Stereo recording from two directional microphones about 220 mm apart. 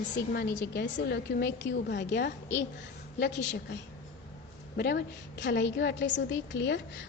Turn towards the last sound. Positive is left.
turn(degrees=55)  # may be behind; listen again after turning